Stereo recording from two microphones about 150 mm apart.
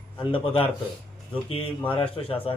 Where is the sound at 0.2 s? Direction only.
35° left (ahead or behind).